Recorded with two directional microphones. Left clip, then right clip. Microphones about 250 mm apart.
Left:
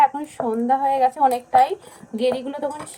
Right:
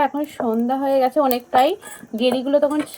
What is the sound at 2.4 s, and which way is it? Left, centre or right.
Speech, right.